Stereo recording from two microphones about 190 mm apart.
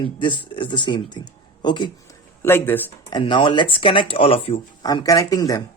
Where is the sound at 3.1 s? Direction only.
25° left (ahead or behind).